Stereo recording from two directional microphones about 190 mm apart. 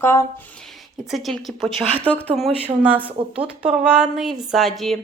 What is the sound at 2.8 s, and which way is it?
Speech, 5° right (ahead or behind).